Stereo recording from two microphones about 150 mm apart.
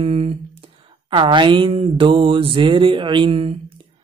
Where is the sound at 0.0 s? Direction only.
40° right (ahead or behind).